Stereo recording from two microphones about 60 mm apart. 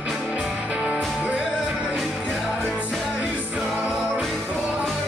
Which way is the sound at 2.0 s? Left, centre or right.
Centre.